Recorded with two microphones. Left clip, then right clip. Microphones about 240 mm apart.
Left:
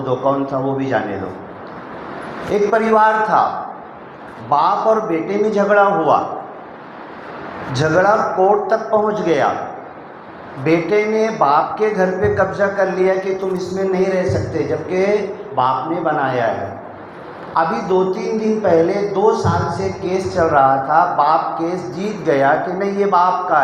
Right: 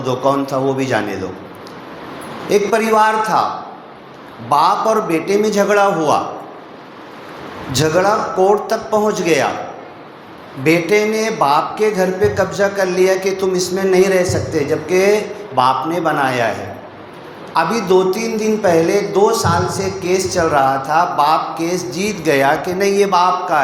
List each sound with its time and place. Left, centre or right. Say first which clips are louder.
0.0 s speech: right 1 dB; right
2.5 s speech: right 1 dB; right
4.4 s speech: right 1 dB; right
7.8 s speech: even; right
10.6 s speech: right 2 dB; right
17.5 s speech: right 2 dB; right